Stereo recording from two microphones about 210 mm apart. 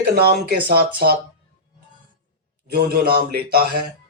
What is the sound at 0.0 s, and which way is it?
Speech, 50° right (ahead or behind).